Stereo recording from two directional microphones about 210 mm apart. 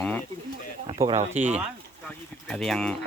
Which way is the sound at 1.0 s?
15° right (ahead or behind).